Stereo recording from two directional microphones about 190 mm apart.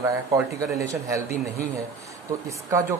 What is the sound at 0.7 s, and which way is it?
Speech, 15° right (ahead or behind).